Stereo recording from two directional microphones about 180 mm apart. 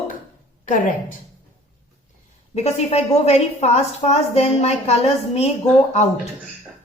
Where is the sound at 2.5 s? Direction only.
35° left (ahead or behind).